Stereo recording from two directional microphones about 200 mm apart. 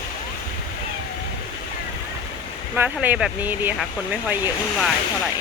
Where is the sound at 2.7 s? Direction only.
10° right (ahead or behind).